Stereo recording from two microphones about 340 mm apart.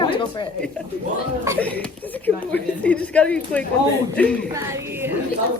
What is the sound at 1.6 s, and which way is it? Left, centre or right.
Speech, centre.